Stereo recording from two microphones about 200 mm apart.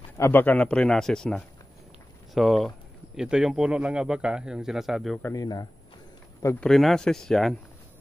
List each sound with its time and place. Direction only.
0.2 s speech: 10° left (ahead or behind)
5.2 s speech: 15° left (ahead or behind)
6.4 s speech: 5° left (ahead or behind)